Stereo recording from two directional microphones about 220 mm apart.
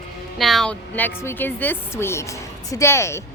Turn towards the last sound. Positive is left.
turn(degrees=10)  # may be behind; listen again after turning